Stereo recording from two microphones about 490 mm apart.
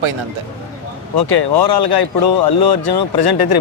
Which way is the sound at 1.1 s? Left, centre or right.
Left.